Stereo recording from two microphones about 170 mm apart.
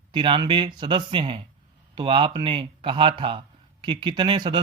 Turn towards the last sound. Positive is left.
turn(degrees=-30)  # may be behind; listen again after turning